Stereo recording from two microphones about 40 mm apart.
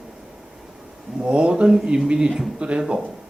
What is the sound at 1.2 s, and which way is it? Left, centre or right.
Speech, right.